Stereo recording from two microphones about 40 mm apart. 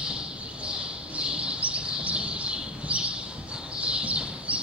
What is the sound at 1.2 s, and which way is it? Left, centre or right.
Bird, right.